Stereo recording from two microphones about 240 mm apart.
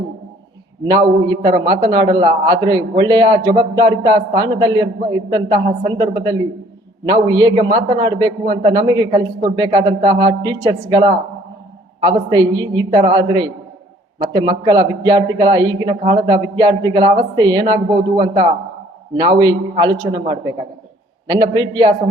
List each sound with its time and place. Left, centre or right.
0.9 s a man's voice: centre